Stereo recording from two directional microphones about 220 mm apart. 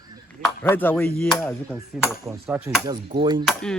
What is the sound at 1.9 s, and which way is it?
Speech, 5° right (ahead or behind).